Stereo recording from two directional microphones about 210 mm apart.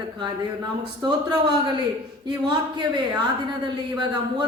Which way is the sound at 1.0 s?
20° right (ahead or behind).